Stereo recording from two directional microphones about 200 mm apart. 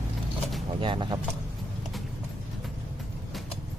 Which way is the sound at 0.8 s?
25° right (ahead or behind).